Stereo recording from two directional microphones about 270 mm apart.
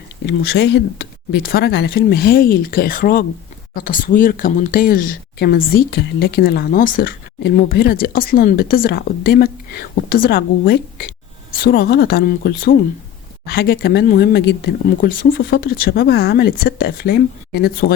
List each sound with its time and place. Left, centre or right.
0.3 s speech: left